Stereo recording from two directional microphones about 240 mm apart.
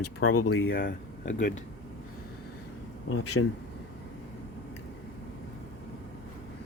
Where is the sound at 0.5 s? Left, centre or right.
Left.